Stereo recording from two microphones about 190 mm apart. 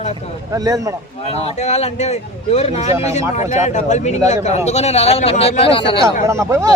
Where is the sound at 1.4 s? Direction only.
35° left (ahead or behind).